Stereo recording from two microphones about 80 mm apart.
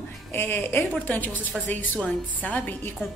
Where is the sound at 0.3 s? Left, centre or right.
Left.